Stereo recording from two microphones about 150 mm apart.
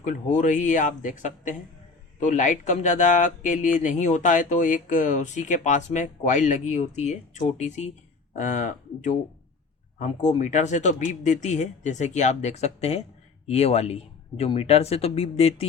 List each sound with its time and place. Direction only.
0.0 s speech: 55° left (ahead or behind)